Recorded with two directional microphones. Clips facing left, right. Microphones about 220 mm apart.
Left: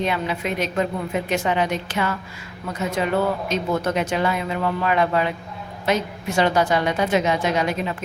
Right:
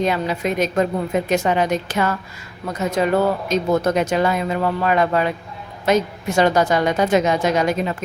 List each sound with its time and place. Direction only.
0.0 s a woman's voice: 40° right (ahead or behind)